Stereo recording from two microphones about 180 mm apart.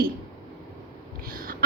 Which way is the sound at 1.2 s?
55° right (ahead or behind).